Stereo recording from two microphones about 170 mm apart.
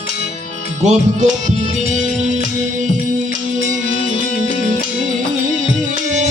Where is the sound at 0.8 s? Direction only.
45° right (ahead or behind).